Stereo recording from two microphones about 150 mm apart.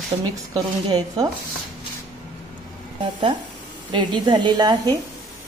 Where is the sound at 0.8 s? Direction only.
25° right (ahead or behind).